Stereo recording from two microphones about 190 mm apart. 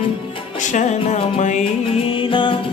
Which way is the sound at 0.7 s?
40° left (ahead or behind).